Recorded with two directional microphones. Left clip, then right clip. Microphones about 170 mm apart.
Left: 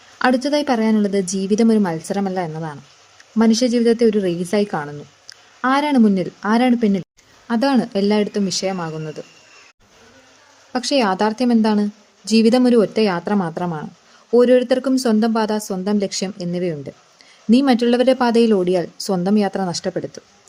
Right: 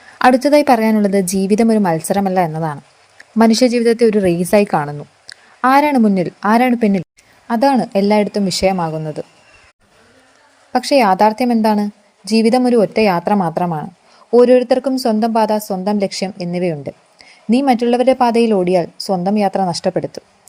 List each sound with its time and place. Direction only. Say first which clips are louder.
0.2 s a woman's voice: right 7 dB; 20° right (ahead or behind)
10.7 s a woman's voice: right 6 dB; 15° right (ahead or behind)